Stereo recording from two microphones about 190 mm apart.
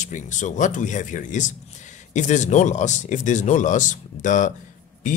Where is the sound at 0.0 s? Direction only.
40° left (ahead or behind).